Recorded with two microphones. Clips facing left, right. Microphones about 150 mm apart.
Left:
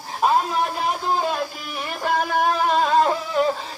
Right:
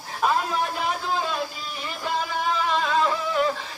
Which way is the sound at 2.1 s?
55° left (ahead or behind).